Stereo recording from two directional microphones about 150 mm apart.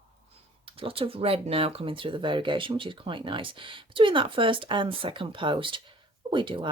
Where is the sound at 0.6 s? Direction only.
35° right (ahead or behind).